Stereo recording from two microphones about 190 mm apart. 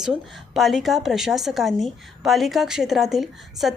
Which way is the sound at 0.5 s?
Centre (ahead or behind).